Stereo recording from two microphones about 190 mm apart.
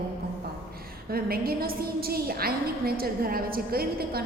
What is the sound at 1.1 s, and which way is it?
A woman's voice, 50° right (ahead or behind).